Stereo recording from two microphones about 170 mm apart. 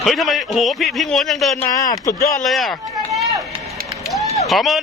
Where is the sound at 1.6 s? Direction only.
15° left (ahead or behind).